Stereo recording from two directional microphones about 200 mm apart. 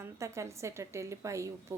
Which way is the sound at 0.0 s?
15° right (ahead or behind).